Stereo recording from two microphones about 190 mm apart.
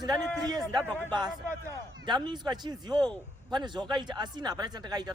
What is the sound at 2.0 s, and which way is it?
A man's voice, 25° right (ahead or behind).